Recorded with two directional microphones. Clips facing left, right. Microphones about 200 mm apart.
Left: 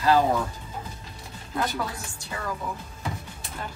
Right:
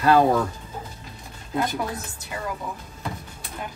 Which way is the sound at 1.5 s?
20° right (ahead or behind).